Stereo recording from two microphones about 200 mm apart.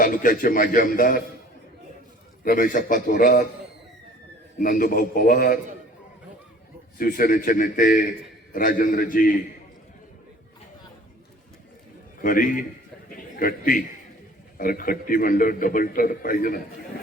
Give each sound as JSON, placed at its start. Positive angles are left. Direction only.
{"t": 0.0, "sound": "a man's voice", "side_deg": 45}
{"t": 2.4, "sound": "a man's voice", "side_deg": 45}
{"t": 4.6, "sound": "a man's voice", "side_deg": 45}
{"t": 7.0, "sound": "a man's voice", "side_deg": 45}
{"t": 12.2, "sound": "a man's voice", "side_deg": 40}